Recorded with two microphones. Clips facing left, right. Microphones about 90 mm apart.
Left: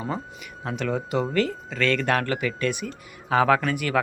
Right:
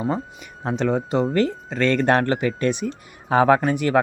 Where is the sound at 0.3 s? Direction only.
30° right (ahead or behind).